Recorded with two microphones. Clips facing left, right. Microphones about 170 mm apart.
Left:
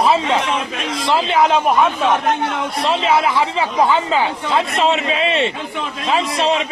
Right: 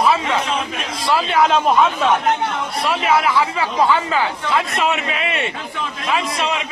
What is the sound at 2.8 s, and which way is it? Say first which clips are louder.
A man's voice: left 1 dB; 25° left (ahead or behind).